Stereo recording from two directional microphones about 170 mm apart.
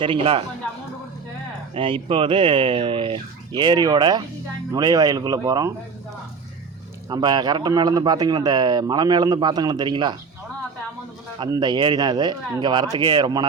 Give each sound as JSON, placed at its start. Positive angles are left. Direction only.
{"t": 0.0, "sound": "speech", "side_deg": -30}
{"t": 1.7, "sound": "speech", "side_deg": -30}
{"t": 7.1, "sound": "speech", "side_deg": -25}
{"t": 11.4, "sound": "speech", "side_deg": -20}